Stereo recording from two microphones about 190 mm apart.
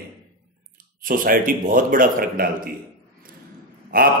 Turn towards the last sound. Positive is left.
turn(degrees=-50)  # may be behind; listen again after turning